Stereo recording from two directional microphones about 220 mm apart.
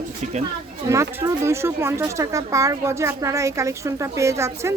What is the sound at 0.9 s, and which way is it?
Speech, 15° right (ahead or behind).